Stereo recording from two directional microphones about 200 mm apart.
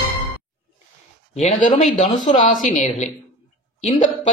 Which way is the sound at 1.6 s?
30° left (ahead or behind).